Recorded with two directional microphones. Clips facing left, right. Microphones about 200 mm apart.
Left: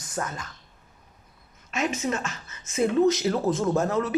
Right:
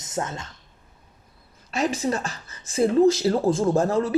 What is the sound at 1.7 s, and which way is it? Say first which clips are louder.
Speech: right 3 dB; 35° right (ahead or behind).